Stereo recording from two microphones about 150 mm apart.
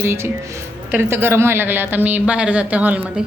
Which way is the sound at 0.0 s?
15° right (ahead or behind).